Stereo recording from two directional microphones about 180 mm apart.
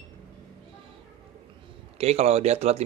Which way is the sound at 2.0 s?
35° right (ahead or behind).